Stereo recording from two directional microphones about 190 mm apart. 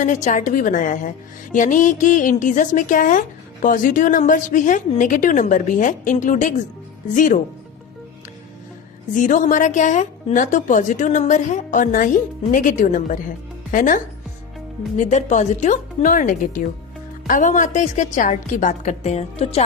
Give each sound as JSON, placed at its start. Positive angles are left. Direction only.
{"t": 0.0, "sound": "a woman's voice", "side_deg": 40}
{"t": 9.1, "sound": "a woman's voice", "side_deg": 40}